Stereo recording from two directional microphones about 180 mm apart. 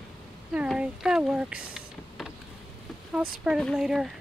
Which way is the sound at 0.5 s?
5° right (ahead or behind).